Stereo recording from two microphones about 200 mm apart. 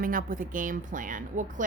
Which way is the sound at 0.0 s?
45° right (ahead or behind).